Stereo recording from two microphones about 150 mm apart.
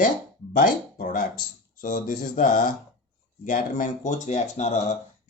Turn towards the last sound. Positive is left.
turn(degrees=50)  # may be behind; listen again after turning